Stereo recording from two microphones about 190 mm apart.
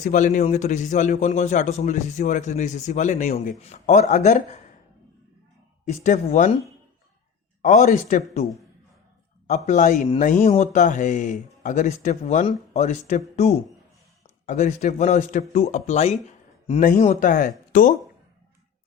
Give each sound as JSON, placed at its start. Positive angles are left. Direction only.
{"t": 0.0, "sound": "a man's voice", "side_deg": 40}
{"t": 5.8, "sound": "a man's voice", "side_deg": 40}
{"t": 7.6, "sound": "a man's voice", "side_deg": 40}
{"t": 9.5, "sound": "a man's voice", "side_deg": 40}
{"t": 14.4, "sound": "a man's voice", "side_deg": 40}
{"t": 17.7, "sound": "a sound", "side_deg": 45}